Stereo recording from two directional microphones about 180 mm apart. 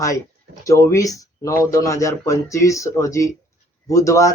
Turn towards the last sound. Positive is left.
turn(degrees=20)  # may be behind; listen again after turning